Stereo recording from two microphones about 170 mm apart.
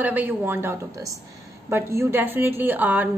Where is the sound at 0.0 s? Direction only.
10° right (ahead or behind).